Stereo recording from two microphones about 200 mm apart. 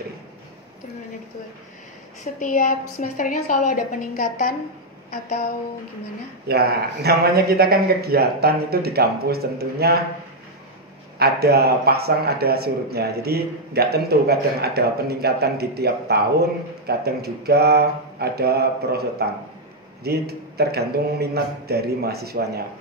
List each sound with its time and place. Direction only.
2.4 s a woman's voice: 40° left (ahead or behind)
6.4 s speech: 50° right (ahead or behind)
11.1 s speech: 55° right (ahead or behind)